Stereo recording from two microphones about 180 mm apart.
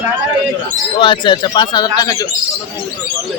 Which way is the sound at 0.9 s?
25° left (ahead or behind).